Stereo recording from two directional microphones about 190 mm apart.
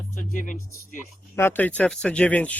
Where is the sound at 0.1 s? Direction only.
45° left (ahead or behind).